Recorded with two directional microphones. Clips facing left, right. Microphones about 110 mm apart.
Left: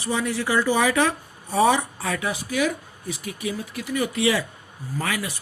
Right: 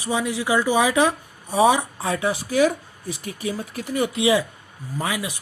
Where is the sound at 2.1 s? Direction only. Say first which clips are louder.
Right 5 dB; 30° right (ahead or behind).